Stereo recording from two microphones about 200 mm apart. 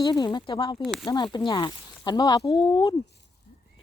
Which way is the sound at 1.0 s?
20° left (ahead or behind).